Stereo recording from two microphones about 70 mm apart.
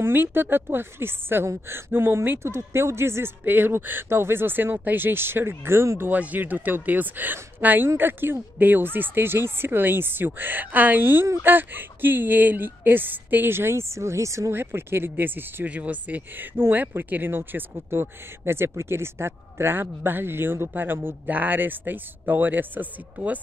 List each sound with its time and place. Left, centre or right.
0.0 s speech: right
14.5 s speech: right